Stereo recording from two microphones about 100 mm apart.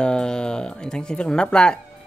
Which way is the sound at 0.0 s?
10° left (ahead or behind).